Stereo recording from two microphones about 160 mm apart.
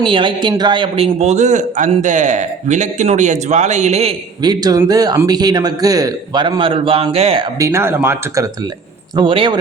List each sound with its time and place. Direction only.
0.0 s speech: 30° right (ahead or behind)
4.4 s a man's voice: 25° right (ahead or behind)
7.6 s speech: 15° right (ahead or behind)
9.1 s a man's voice: 30° right (ahead or behind)